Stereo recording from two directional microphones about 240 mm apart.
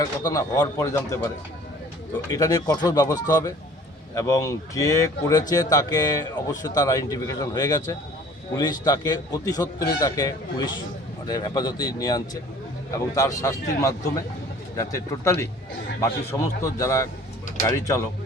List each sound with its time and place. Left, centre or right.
0.0 s speech: centre
2.3 s speech: centre